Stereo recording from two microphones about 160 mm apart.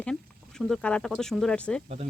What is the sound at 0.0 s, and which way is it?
Speech, 5° left (ahead or behind).